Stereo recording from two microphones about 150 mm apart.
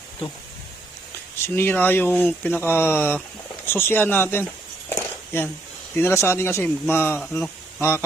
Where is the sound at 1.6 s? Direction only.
15° left (ahead or behind).